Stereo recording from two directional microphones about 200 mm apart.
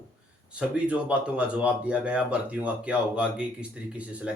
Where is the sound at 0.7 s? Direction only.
5° right (ahead or behind).